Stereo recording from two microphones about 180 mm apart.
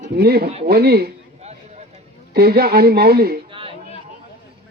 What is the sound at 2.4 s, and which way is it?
Speech, 60° right (ahead or behind).